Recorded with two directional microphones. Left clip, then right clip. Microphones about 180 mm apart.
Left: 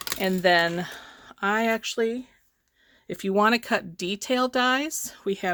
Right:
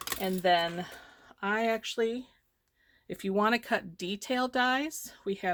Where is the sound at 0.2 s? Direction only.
55° left (ahead or behind).